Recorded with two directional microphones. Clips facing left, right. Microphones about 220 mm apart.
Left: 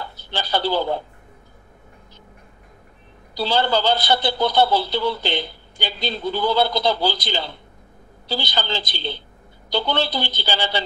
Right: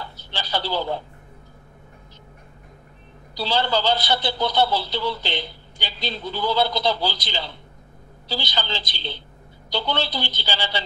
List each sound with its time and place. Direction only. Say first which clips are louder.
0.0 s speech: left 4 dB; 50° left (ahead or behind)
3.3 s a man's voice: left 3 dB; 50° left (ahead or behind)